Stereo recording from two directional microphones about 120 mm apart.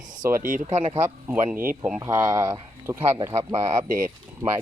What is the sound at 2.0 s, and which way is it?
Speech, 30° right (ahead or behind).